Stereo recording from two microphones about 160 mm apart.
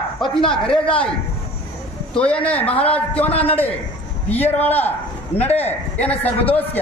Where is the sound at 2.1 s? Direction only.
5° left (ahead or behind).